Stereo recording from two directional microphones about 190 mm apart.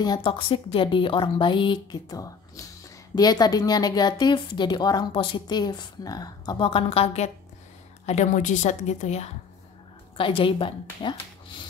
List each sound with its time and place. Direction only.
0.0 s a woman's voice: 25° left (ahead or behind)